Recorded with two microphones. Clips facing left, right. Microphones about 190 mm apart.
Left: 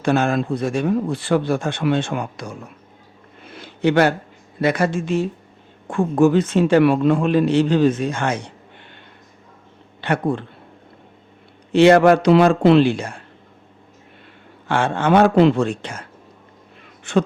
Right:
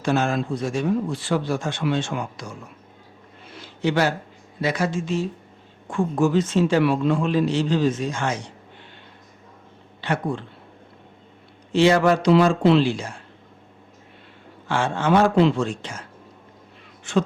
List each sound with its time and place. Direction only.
0.0 s a man's voice: 60° left (ahead or behind)
3.4 s a sound: 55° left (ahead or behind)
4.6 s a man's voice: 55° left (ahead or behind)
10.0 s a man's voice: 60° left (ahead or behind)
11.7 s a man's voice: 60° left (ahead or behind)
14.7 s a man's voice: 60° left (ahead or behind)